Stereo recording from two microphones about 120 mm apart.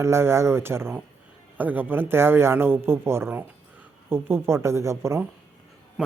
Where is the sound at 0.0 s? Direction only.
20° right (ahead or behind).